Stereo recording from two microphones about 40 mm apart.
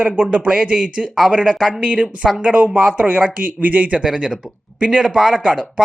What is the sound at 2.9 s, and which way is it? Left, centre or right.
Speech, right.